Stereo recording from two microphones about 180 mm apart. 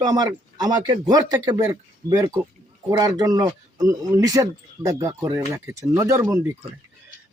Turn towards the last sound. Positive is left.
turn(degrees=-10)  # may be behind; listen again after turning